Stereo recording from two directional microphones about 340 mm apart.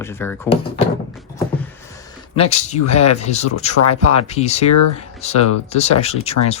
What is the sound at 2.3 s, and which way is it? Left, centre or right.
Speech, centre.